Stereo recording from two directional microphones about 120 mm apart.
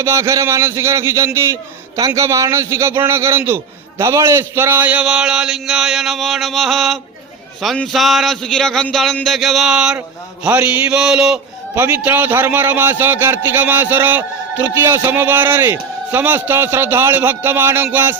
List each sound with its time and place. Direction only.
0.0 s a man's voice: 25° right (ahead or behind)